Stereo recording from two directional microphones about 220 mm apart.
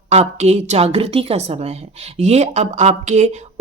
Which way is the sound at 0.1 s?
30° right (ahead or behind).